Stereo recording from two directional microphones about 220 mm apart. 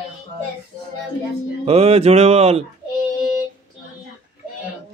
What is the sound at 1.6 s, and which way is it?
A child's voice, 25° right (ahead or behind).